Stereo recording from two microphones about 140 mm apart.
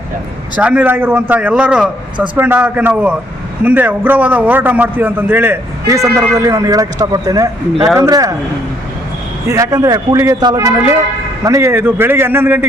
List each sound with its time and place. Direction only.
0.5 s a man's voice: 10° right (ahead or behind); by 8.4 s 25° right (ahead or behind)
9.5 s a man's voice: 25° right (ahead or behind)